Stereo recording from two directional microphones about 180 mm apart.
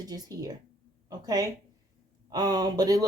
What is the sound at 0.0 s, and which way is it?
Speech, 20° right (ahead or behind).